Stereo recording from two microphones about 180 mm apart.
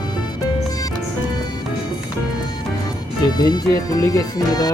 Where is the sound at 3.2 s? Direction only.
20° left (ahead or behind).